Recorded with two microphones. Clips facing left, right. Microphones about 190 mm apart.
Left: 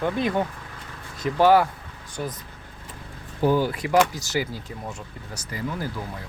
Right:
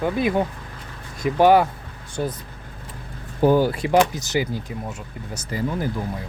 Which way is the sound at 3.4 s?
50° right (ahead or behind).